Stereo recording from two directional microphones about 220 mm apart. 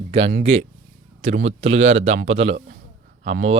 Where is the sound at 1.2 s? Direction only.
30° right (ahead or behind).